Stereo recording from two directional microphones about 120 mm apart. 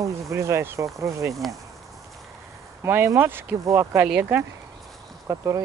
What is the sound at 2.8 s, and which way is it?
Speech, 20° right (ahead or behind).